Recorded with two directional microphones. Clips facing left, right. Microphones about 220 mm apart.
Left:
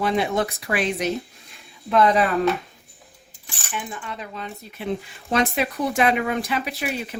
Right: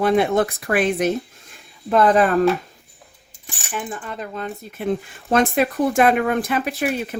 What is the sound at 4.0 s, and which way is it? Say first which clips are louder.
Speech: right 4 dB; 45° right (ahead or behind).